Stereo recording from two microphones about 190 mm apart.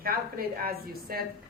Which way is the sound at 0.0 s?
50° right (ahead or behind).